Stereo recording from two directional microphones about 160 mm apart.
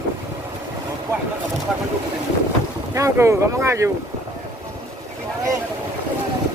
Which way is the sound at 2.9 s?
20° right (ahead or behind).